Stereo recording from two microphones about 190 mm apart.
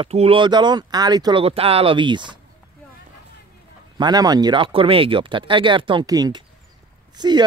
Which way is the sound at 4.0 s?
20° right (ahead or behind).